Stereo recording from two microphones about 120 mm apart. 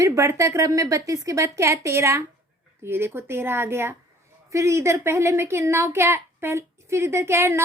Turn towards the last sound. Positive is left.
turn(degrees=-20)  # may be behind; listen again after turning